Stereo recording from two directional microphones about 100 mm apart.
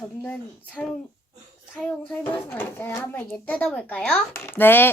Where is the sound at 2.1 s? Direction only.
20° left (ahead or behind).